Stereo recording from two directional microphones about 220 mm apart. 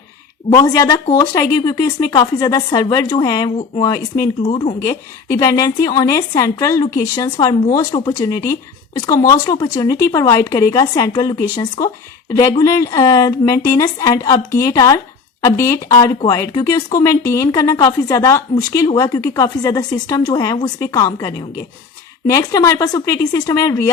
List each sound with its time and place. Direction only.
0.5 s a woman's voice: 15° left (ahead or behind)